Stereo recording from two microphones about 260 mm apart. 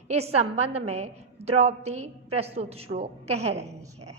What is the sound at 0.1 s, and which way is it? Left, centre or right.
A woman's voice, right.